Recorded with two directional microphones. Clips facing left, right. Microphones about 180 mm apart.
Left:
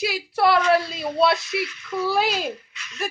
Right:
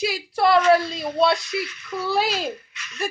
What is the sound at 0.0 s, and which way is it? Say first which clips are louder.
Speech: even; centre (ahead or behind).